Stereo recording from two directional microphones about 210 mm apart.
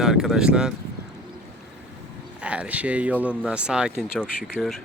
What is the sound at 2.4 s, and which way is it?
Speech, 5° right (ahead or behind).